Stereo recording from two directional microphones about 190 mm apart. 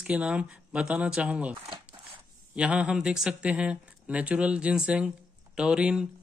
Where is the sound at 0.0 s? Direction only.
5° right (ahead or behind).